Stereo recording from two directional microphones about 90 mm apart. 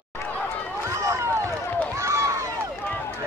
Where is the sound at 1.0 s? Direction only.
35° right (ahead or behind).